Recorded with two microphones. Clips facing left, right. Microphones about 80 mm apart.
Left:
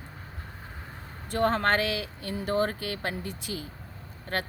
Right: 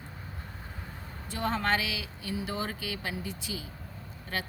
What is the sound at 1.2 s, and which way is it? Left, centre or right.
Speech, left.